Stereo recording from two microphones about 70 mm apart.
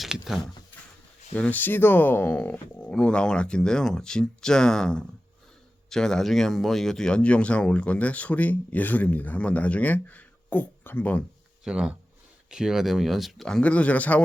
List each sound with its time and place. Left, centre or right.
0.0 s a sound: centre
1.3 s speech: left
11.6 s speech: centre
13.6 s speech: centre